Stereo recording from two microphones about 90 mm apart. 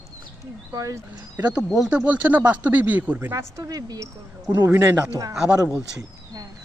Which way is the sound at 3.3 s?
40° right (ahead or behind).